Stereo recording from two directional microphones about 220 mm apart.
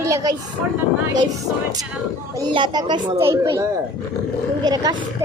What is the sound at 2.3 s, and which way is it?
A child's voice, 20° right (ahead or behind).